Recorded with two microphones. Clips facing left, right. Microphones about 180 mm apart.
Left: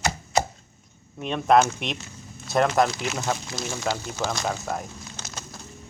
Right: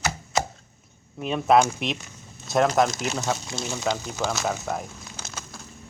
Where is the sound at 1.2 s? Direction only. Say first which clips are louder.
Even; 5° right (ahead or behind).